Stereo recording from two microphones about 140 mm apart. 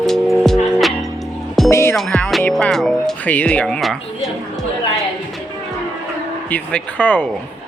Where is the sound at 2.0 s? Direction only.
5° left (ahead or behind).